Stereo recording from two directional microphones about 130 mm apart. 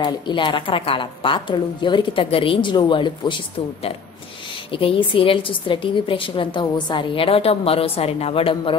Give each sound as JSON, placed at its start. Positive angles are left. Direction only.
{"t": 0.0, "sound": "a woman's voice", "side_deg": 35}